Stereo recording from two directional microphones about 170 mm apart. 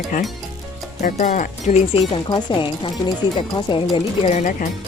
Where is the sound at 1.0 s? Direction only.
45° left (ahead or behind).